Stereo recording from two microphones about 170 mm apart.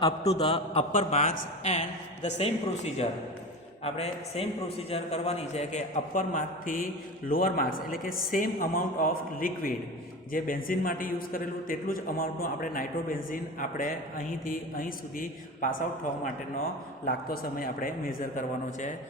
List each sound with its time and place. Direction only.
0.2 s a man's voice: 35° left (ahead or behind); by 15.7 s 55° left (ahead or behind)
17.1 s a man's voice: 60° left (ahead or behind)